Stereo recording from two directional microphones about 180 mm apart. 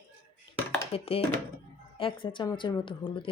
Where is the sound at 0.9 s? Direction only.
30° left (ahead or behind).